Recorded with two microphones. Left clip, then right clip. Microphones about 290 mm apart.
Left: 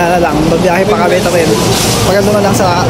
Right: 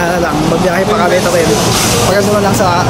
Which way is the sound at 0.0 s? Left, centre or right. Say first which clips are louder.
Left 3 dB; centre.